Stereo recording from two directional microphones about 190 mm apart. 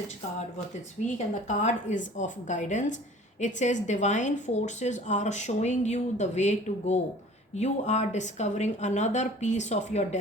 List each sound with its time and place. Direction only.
1.0 s speech: 40° left (ahead or behind)